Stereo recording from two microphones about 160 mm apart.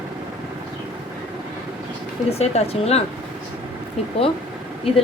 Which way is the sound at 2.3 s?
40° left (ahead or behind).